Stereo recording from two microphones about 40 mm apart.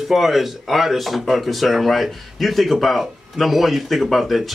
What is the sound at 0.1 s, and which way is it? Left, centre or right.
Speech, centre.